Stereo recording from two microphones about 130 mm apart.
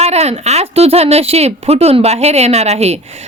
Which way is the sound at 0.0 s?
55° right (ahead or behind).